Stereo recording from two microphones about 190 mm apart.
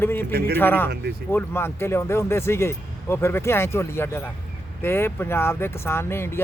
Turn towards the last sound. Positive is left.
turn(degrees=15)  # may be behind; listen again after turning